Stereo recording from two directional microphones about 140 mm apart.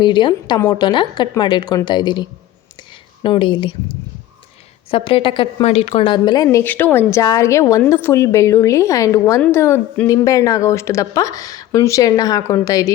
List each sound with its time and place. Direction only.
0.0 s a woman's voice: 35° left (ahead or behind)
3.2 s a woman's voice: 35° left (ahead or behind)
4.9 s a woman's voice: 40° left (ahead or behind); by 12.9 s 25° left (ahead or behind)